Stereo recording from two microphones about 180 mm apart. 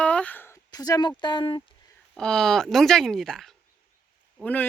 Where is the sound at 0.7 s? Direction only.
20° left (ahead or behind).